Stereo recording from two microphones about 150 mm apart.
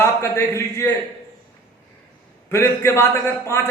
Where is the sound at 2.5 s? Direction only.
15° left (ahead or behind).